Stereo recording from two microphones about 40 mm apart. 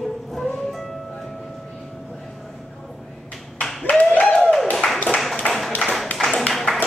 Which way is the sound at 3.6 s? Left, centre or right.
Centre.